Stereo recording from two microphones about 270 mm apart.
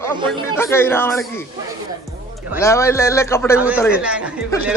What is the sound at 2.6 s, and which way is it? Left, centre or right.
Speech, centre.